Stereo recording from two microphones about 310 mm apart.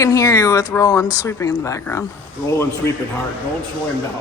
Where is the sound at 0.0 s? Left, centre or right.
Centre.